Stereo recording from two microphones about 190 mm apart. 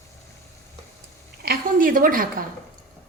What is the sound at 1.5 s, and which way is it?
Speech, 45° right (ahead or behind).